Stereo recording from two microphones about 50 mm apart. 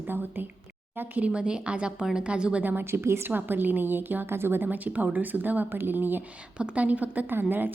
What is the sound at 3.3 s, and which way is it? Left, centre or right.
A woman's voice, right.